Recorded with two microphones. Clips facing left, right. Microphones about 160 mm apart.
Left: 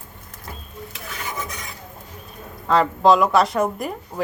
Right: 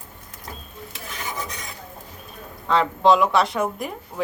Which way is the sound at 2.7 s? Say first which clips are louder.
Left 2 dB; centre (ahead or behind).